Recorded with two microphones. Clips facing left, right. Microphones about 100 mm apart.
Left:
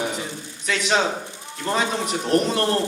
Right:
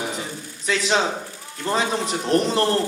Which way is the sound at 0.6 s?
30° right (ahead or behind).